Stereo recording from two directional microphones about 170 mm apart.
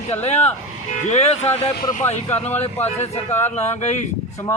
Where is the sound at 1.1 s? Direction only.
40° left (ahead or behind).